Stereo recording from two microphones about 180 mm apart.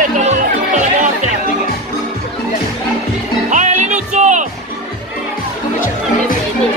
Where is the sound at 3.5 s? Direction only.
40° right (ahead or behind).